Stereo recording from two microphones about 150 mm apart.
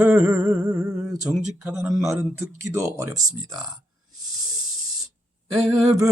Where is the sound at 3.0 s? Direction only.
25° right (ahead or behind).